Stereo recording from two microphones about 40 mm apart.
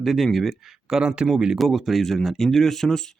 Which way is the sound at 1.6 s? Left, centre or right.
Centre.